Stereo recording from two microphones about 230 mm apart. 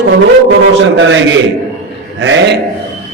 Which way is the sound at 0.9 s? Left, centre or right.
Right.